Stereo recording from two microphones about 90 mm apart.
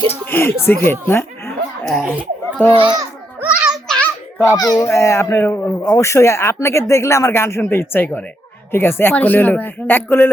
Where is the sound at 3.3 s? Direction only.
15° right (ahead or behind).